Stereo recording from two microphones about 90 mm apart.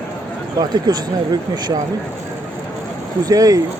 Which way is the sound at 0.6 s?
50° right (ahead or behind).